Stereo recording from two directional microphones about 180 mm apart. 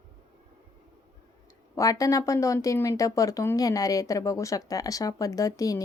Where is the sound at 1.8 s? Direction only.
20° left (ahead or behind).